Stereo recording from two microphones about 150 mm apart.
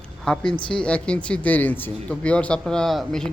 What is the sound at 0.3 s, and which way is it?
Speech, 5° left (ahead or behind).